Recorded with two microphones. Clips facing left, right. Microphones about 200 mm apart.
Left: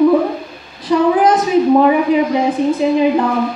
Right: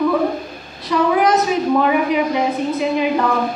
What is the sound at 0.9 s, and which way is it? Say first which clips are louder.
A woman's voice: left 4 dB; 30° left (ahead or behind).